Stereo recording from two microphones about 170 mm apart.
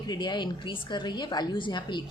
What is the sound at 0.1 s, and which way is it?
A woman's voice, 25° left (ahead or behind).